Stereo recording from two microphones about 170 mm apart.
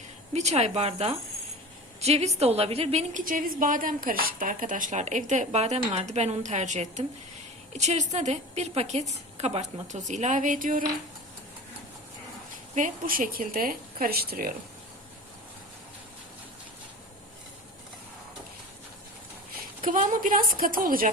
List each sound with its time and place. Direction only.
0.3 s a woman's voice: 40° right (ahead or behind)
12.7 s speech: 50° right (ahead or behind)
19.8 s a woman's voice: 50° right (ahead or behind)